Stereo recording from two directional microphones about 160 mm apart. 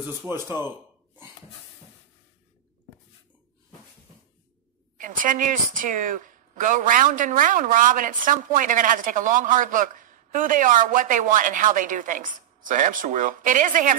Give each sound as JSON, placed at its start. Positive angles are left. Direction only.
{"t": 0.2, "sound": "speech", "side_deg": -15}
{"t": 4.9, "sound": "speech", "side_deg": -55}